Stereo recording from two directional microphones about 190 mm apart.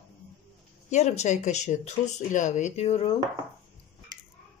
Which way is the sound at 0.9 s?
40° left (ahead or behind).